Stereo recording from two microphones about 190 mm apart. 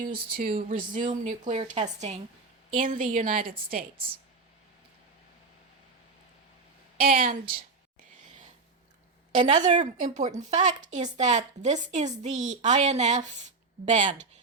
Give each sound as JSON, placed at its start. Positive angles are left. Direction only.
{"t": 0.3, "sound": "speech", "side_deg": -50}
{"t": 7.0, "sound": "speech", "side_deg": -50}
{"t": 9.6, "sound": "a woman's voice", "side_deg": -40}